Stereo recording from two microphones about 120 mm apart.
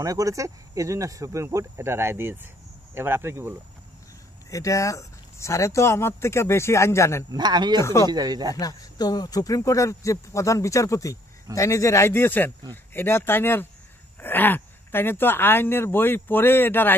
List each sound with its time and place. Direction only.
0.0 s speech: 30° right (ahead or behind)
4.5 s speech: 25° left (ahead or behind)
7.2 s speech: 35° right (ahead or behind)
7.8 s speech: 25° left (ahead or behind)
8.1 s speech: 35° right (ahead or behind)
8.5 s speech: 30° left (ahead or behind); by 16.9 s 15° left (ahead or behind)